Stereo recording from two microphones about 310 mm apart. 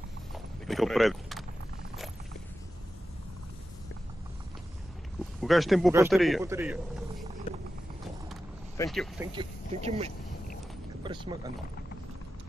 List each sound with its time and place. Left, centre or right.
0.3 s a sound: centre
5.4 s a man's voice: centre
8.3 s vehicle: centre
9.3 s speech: centre